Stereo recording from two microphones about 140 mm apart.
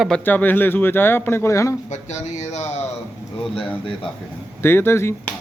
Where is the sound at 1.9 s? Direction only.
55° left (ahead or behind).